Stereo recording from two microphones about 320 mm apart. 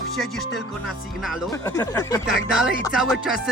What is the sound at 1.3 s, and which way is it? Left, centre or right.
Speech, centre.